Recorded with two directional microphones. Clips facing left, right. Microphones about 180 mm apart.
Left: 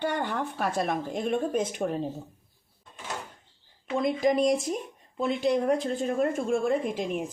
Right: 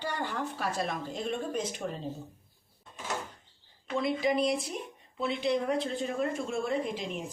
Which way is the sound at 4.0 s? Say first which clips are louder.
Left 4 dB; 45° left (ahead or behind).